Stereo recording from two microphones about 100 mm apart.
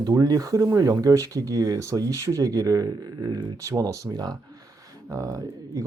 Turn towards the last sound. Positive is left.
turn(degrees=-35)  # may be behind; listen again after turning